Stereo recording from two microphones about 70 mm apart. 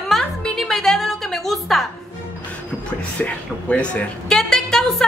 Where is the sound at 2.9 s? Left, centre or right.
Centre.